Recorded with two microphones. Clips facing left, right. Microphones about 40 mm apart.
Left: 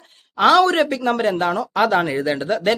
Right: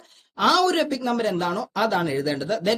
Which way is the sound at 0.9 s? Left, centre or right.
Left.